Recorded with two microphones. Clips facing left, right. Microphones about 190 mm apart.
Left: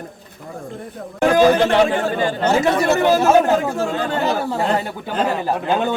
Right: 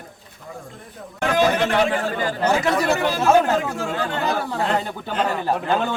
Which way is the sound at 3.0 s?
45° left (ahead or behind).